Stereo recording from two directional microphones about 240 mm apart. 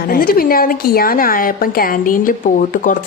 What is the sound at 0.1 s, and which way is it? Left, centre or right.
A woman's voice, left.